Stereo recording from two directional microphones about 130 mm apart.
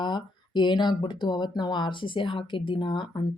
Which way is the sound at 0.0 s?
35° left (ahead or behind).